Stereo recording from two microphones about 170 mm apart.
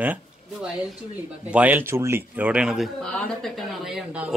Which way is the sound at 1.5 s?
10° right (ahead or behind).